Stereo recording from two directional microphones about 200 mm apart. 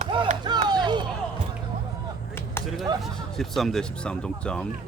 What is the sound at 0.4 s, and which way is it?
Music, 20° right (ahead or behind).